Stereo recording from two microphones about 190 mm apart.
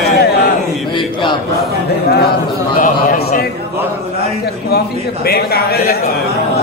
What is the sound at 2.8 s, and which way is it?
Speech, 45° left (ahead or behind).